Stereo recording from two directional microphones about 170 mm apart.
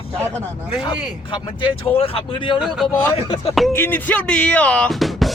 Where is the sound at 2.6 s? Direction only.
Centre (ahead or behind).